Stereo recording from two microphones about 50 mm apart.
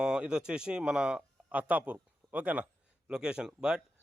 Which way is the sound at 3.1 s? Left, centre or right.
Centre.